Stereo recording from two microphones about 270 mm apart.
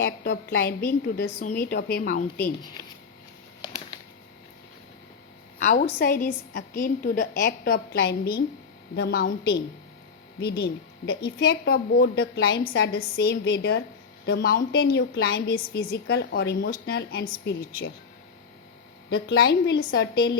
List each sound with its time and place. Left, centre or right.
0.0 s a woman's voice: left
2.4 s speech: centre
5.6 s a woman's voice: left
19.1 s a woman's voice: left